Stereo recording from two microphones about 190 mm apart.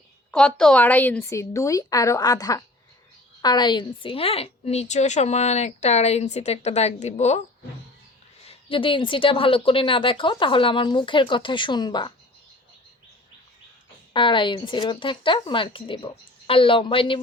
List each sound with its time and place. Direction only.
0.3 s a woman's voice: 5° left (ahead or behind); by 7.4 s 35° left (ahead or behind)
8.4 s speech: 25° left (ahead or behind)
14.1 s speech: 25° left (ahead or behind)